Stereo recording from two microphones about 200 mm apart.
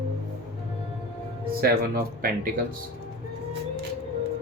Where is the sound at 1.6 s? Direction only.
45° right (ahead or behind).